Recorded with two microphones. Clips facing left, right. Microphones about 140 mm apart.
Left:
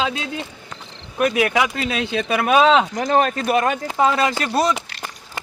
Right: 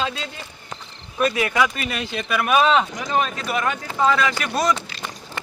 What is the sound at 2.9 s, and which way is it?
Speech, 50° left (ahead or behind).